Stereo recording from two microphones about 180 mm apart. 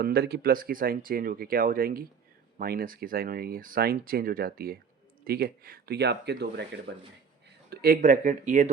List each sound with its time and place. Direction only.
0.0 s speech: 60° right (ahead or behind); by 8.7 s 45° right (ahead or behind)